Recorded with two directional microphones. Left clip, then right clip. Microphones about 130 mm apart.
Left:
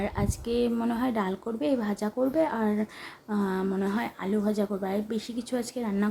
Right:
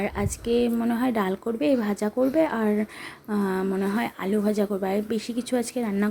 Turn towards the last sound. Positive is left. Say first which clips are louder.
# right 5 dB
turn(degrees=-25)  # may be behind; listen again after turning